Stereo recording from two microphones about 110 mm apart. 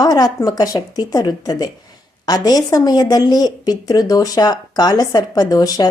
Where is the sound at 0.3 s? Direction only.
35° left (ahead or behind).